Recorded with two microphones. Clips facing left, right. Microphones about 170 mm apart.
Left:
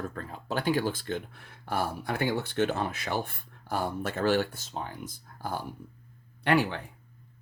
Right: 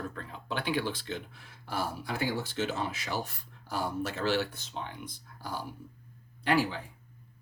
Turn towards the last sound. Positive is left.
turn(degrees=65)  # may be behind; listen again after turning